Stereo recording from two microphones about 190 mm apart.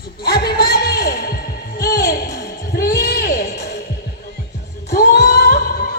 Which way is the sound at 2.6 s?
50° left (ahead or behind).